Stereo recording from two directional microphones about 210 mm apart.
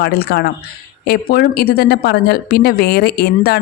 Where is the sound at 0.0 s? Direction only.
50° left (ahead or behind).